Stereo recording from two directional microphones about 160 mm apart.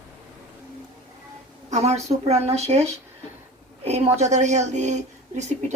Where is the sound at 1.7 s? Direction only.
40° right (ahead or behind).